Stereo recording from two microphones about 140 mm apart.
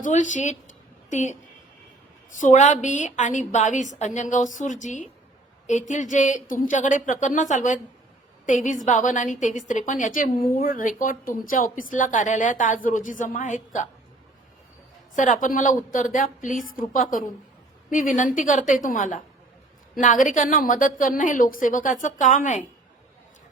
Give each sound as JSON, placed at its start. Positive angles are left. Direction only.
{"t": 0.0, "sound": "a woman's voice", "side_deg": 60}
{"t": 2.4, "sound": "a woman's voice", "side_deg": 60}
{"t": 15.1, "sound": "a woman's voice", "side_deg": 65}